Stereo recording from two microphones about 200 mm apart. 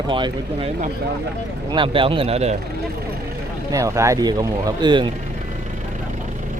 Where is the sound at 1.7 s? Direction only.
25° right (ahead or behind).